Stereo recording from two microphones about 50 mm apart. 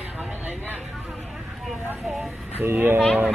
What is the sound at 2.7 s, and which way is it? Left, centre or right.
Speech, right.